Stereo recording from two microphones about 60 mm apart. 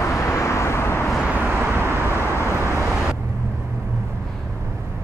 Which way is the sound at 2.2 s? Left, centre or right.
Left.